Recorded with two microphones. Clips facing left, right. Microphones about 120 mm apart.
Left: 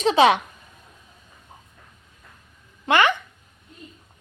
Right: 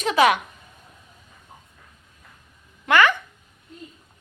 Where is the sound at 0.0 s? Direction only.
25° left (ahead or behind).